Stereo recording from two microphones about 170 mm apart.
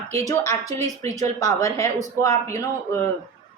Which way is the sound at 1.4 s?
20° left (ahead or behind).